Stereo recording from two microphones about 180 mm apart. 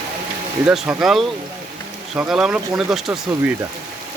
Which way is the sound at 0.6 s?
5° right (ahead or behind).